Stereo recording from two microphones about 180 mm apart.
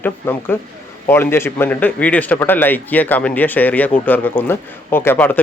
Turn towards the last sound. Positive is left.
turn(degrees=10)  # may be behind; listen again after turning